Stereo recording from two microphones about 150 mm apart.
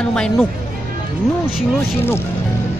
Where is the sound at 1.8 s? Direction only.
15° left (ahead or behind).